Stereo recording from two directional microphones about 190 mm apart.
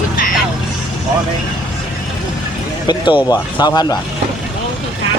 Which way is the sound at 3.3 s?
20° left (ahead or behind).